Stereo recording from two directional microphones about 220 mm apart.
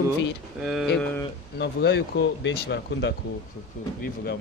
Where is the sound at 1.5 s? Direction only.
50° left (ahead or behind).